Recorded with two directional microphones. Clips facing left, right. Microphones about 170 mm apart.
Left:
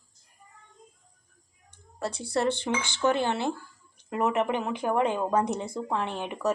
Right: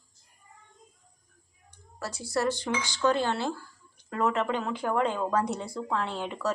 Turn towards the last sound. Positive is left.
turn(degrees=15)  # may be behind; listen again after turning